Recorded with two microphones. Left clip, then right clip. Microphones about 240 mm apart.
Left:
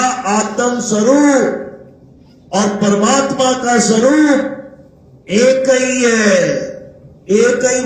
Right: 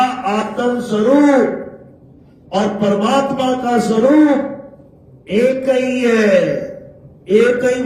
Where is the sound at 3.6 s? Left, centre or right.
Left.